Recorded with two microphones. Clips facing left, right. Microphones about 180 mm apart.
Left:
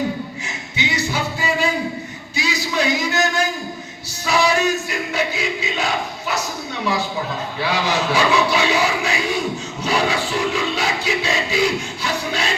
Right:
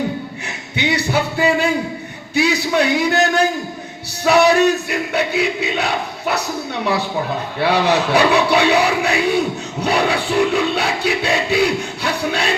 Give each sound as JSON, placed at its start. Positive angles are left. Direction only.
{"t": 0.4, "sound": "a sound", "side_deg": -60}
{"t": 2.3, "sound": "a man's voice", "side_deg": -60}
{"t": 4.3, "sound": "music", "side_deg": -60}
{"t": 7.6, "sound": "music", "side_deg": -60}